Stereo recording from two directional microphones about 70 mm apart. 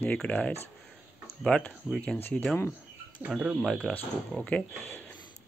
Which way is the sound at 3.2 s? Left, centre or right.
Centre.